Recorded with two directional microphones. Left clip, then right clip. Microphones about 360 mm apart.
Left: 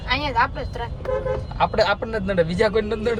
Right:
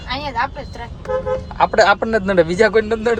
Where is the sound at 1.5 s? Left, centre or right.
Centre.